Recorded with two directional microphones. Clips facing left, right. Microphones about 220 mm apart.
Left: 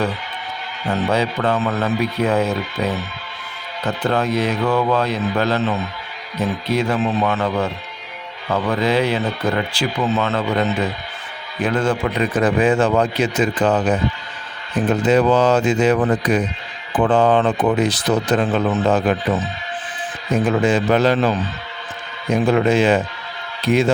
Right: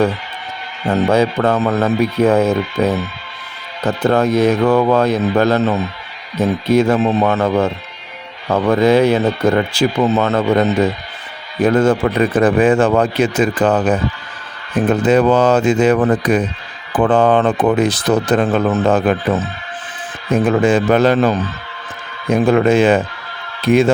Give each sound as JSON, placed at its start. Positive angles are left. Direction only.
{"t": 0.9, "sound": "speech", "side_deg": -45}